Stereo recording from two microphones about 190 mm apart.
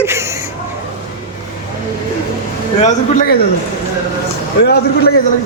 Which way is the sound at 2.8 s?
40° left (ahead or behind).